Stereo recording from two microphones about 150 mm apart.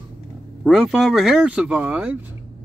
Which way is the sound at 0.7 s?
Centre (ahead or behind).